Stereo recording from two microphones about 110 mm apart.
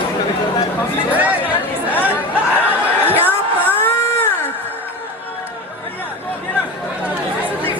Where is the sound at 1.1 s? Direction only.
15° right (ahead or behind).